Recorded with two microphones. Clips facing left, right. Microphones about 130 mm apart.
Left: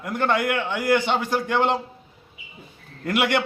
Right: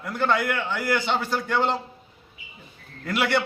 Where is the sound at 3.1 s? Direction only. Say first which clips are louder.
Left 2 dB; 15° left (ahead or behind).